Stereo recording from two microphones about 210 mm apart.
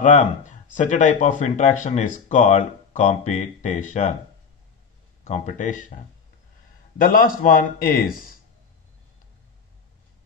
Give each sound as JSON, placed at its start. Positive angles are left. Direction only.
{"t": 0.0, "sound": "speech", "side_deg": 35}
{"t": 5.2, "sound": "speech", "side_deg": 35}
{"t": 7.0, "sound": "a man's voice", "side_deg": 40}